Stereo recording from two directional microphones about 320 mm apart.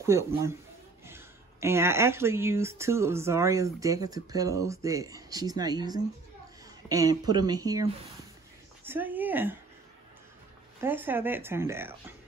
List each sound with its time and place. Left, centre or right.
0.0 s speech: centre
10.8 s speech: centre